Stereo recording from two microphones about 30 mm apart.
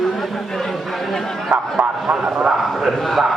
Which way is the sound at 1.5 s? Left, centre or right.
Right.